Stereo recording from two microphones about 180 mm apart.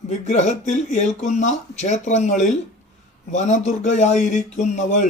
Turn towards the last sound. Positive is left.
turn(degrees=45)  # may be behind; listen again after turning